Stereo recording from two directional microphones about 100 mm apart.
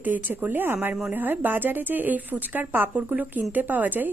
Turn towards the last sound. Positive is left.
turn(degrees=-15)  # may be behind; listen again after turning